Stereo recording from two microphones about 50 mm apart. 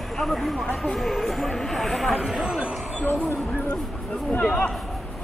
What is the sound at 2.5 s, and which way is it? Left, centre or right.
Speech, centre.